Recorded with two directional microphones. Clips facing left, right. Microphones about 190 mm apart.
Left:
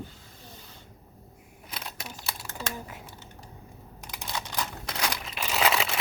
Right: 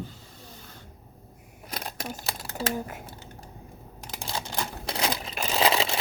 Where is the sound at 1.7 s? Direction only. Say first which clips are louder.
Right 6 dB; 45° right (ahead or behind).